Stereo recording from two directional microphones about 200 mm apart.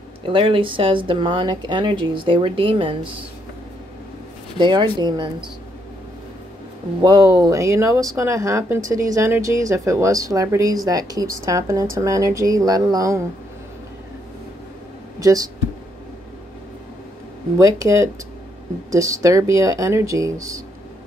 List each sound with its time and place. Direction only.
0.2 s speech: 25° right (ahead or behind)
4.6 s speech: 20° right (ahead or behind)
7.0 s speech: 20° right (ahead or behind)
15.1 s speech: 15° right (ahead or behind)
17.6 s speech: 15° right (ahead or behind)